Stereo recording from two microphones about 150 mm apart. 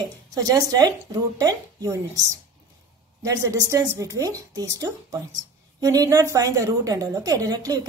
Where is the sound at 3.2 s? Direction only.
25° right (ahead or behind).